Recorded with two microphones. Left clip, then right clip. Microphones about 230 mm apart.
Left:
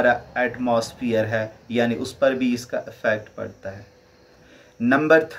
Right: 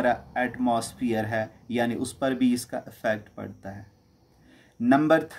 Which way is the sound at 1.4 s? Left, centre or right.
Right.